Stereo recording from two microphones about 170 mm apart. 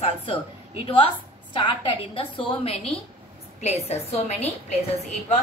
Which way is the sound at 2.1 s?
35° left (ahead or behind).